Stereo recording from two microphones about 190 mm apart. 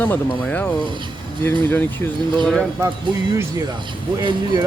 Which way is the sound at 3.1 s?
25° right (ahead or behind).